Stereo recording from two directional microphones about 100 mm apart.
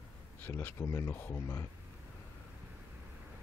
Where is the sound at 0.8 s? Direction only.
35° left (ahead or behind).